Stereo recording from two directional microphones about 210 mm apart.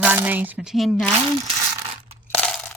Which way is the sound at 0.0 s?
10° right (ahead or behind).